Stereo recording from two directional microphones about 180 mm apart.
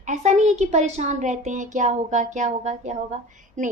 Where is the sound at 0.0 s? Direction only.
40° right (ahead or behind).